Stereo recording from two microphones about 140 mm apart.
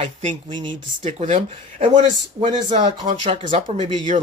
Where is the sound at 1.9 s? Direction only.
55° right (ahead or behind).